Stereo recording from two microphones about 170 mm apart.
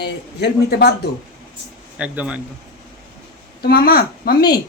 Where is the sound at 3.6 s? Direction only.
65° left (ahead or behind).